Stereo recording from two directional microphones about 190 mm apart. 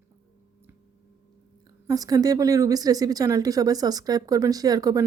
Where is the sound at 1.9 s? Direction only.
20° right (ahead or behind).